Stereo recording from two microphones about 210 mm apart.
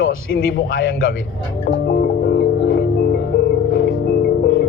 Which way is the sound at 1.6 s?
45° left (ahead or behind).